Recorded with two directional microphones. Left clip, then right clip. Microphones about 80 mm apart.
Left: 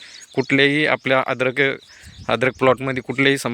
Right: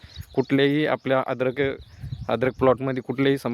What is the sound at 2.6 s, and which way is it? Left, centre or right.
Speech, right.